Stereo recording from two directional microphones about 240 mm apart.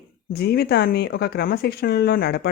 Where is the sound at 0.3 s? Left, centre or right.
Left.